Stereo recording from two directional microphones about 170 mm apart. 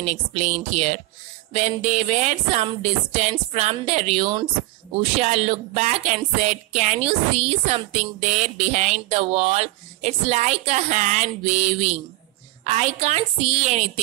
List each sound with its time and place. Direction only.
0.0 s speech: 40° right (ahead or behind)